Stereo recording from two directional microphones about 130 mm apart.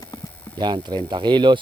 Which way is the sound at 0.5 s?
35° right (ahead or behind).